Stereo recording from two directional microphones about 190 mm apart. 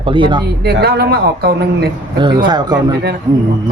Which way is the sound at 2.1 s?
25° right (ahead or behind).